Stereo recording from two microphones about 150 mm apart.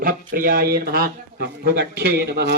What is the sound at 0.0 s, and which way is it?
Speech, 70° right (ahead or behind).